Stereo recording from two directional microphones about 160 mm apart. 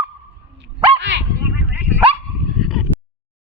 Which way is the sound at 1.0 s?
90° right.